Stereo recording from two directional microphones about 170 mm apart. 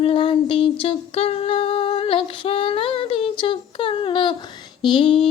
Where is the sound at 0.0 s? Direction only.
30° left (ahead or behind).